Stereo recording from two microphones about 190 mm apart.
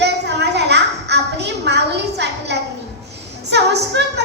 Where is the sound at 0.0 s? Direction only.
60° right (ahead or behind).